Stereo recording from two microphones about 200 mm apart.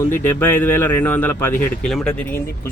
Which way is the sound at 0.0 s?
10° left (ahead or behind).